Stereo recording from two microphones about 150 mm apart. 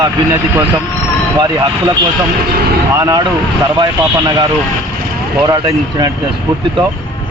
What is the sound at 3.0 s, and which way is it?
Speech, 25° right (ahead or behind).